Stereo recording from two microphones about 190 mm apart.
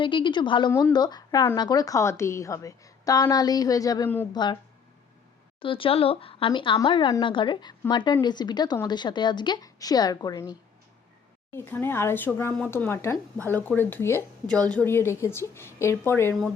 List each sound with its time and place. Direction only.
0.0 s speech: 25° left (ahead or behind)
5.6 s speech: 30° left (ahead or behind); by 16.3 s 15° left (ahead or behind)